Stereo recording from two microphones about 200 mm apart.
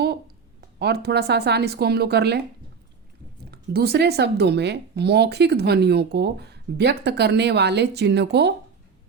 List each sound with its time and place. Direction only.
0.8 s speech: 55° right (ahead or behind)
3.5 s speech: 50° right (ahead or behind)